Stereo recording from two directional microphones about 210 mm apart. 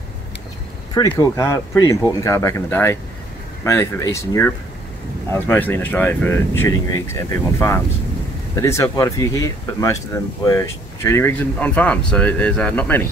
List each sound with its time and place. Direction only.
0.9 s speech: 20° left (ahead or behind)